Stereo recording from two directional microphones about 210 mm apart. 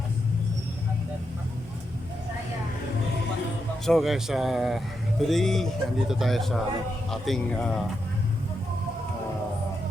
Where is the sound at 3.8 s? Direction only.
Centre (ahead or behind).